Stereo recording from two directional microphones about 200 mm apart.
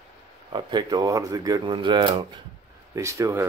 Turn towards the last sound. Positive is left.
turn(degrees=-15)  # may be behind; listen again after turning